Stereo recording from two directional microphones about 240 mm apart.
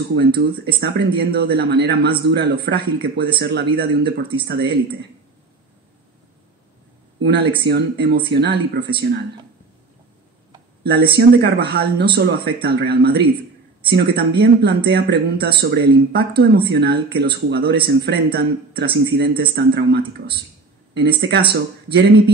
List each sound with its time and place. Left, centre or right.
0.1 s speech: right
7.2 s speech: right
10.8 s speech: right